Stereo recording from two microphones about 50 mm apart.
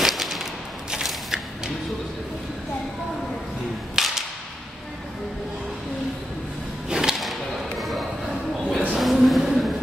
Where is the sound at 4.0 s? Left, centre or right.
Centre.